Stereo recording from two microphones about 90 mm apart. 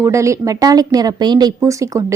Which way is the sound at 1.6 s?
35° right (ahead or behind).